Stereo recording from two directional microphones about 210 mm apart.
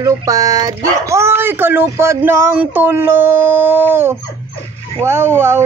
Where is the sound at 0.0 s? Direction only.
15° right (ahead or behind).